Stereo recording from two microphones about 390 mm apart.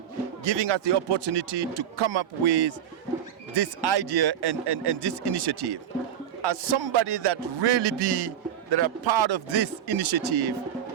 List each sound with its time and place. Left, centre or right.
0.4 s speech: right